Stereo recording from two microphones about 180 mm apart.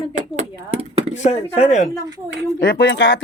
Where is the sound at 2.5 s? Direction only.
55° left (ahead or behind); by 3.1 s 85° left.